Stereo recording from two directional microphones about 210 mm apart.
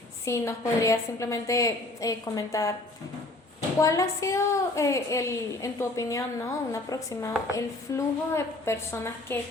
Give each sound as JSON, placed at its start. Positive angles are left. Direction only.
{"t": 0.3, "sound": "a woman's voice", "side_deg": 15}
{"t": 3.8, "sound": "a woman's voice", "side_deg": 15}